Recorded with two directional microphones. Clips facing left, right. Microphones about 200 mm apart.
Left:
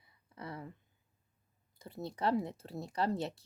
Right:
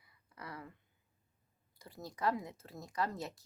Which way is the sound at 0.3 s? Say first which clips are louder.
Left 4 dB; 25° left (ahead or behind).